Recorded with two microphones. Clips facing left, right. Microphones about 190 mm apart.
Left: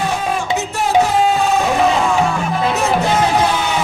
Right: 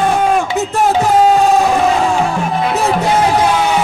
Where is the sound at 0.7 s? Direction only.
45° right (ahead or behind).